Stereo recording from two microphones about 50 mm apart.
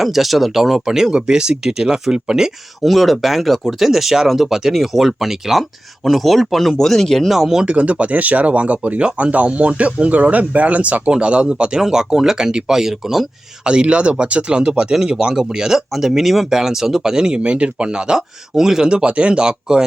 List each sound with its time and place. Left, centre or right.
0.0 s speech: centre
2.8 s speech: centre
7.3 s speech: centre
7.6 s speech: right; by 13.2 s centre
13.7 s speech: right